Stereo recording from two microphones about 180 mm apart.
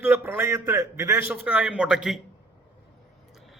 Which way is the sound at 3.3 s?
Centre (ahead or behind).